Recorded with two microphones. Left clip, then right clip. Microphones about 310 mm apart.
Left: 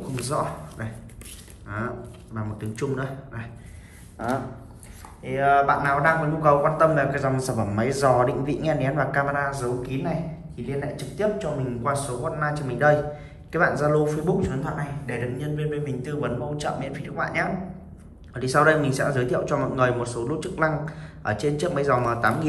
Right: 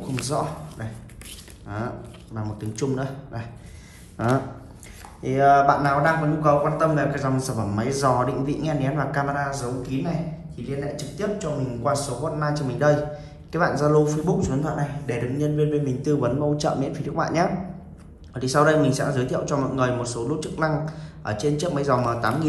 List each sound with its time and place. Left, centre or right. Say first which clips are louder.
0.0 s a man's voice: right 1 dB; centre
2.3 s a man's voice: right 1 dB; centre
5.4 s a man's voice: right 3 dB; centre